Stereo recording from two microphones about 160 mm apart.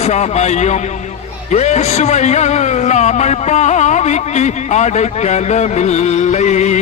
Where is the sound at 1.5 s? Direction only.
45° left (ahead or behind).